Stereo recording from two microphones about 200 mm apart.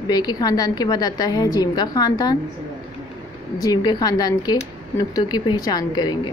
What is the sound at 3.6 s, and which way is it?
A woman's voice, 20° left (ahead or behind).